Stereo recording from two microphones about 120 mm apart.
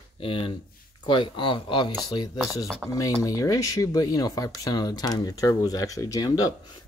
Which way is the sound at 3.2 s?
30° left (ahead or behind).